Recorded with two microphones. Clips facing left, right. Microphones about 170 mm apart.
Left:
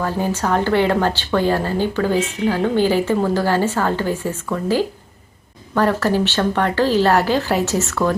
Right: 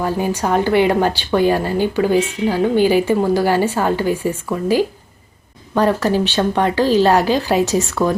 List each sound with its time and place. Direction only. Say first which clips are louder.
0.0 s a woman's voice: right 2 dB; 15° right (ahead or behind)